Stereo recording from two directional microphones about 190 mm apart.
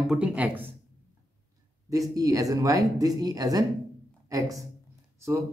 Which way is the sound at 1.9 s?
15° right (ahead or behind).